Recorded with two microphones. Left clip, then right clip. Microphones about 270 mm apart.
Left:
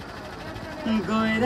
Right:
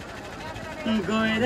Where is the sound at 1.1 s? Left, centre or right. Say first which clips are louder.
Even; left.